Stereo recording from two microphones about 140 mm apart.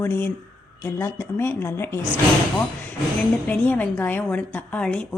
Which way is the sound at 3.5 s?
10° left (ahead or behind).